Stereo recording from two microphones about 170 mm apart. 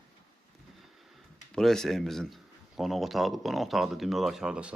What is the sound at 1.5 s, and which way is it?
Speech, centre (ahead or behind).